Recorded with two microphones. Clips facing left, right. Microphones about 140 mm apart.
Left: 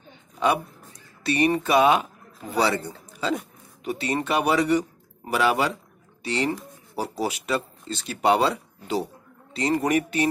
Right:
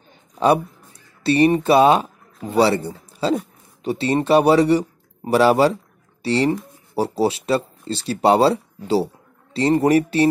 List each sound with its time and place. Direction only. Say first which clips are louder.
1.2 s speech: right 6 dB; 30° right (ahead or behind)